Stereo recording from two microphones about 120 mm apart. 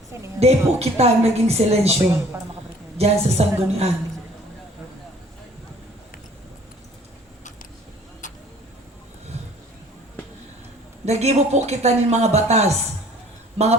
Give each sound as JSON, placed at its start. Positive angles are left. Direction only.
{"t": 0.3, "sound": "speech", "side_deg": -60}
{"t": 3.0, "sound": "speech", "side_deg": -60}
{"t": 11.0, "sound": "speech", "side_deg": -65}